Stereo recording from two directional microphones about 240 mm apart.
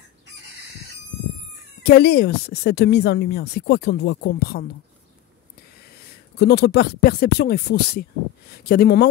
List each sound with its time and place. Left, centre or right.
1.8 s speech: left
6.3 s speech: left